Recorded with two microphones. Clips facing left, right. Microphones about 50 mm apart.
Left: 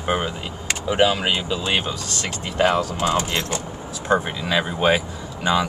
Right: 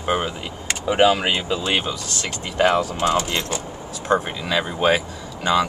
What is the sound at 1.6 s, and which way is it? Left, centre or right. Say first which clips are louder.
Speech: even; centre.